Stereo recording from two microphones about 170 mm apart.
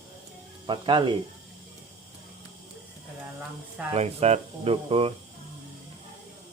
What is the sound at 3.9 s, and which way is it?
Speech, 40° right (ahead or behind).